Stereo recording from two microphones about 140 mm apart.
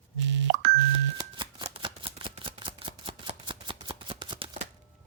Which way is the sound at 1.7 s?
40° right (ahead or behind).